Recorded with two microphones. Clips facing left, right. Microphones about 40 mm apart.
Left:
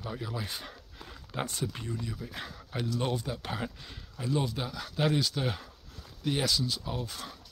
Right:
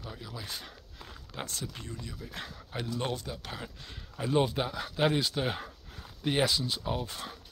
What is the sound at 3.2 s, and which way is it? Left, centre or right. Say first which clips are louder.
Speech: left 5 dB; centre.